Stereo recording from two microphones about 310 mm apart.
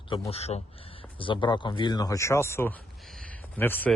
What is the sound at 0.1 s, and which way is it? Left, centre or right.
Speech, centre.